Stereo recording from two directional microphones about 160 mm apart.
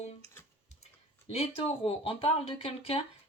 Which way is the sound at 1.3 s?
40° left (ahead or behind).